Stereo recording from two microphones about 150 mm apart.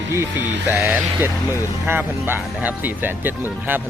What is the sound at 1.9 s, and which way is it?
Speech, 15° right (ahead or behind).